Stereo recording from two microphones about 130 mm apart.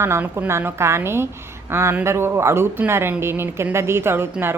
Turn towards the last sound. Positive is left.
turn(degrees=-15)  # may be behind; listen again after turning